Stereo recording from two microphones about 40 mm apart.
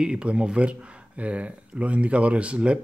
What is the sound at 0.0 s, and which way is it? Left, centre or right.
Speech, right.